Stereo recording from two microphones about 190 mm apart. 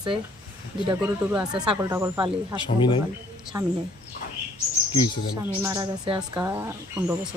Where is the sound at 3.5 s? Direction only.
15° right (ahead or behind).